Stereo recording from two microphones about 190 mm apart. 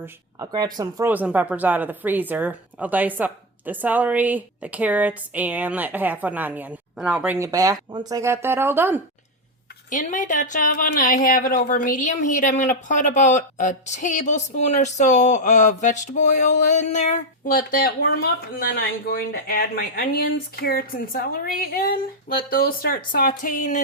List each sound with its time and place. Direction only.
0.0 s speech: 20° right (ahead or behind)
9.9 s speech: 40° left (ahead or behind)